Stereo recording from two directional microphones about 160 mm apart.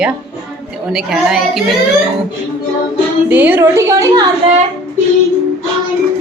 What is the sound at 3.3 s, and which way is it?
A woman's voice, 10° right (ahead or behind).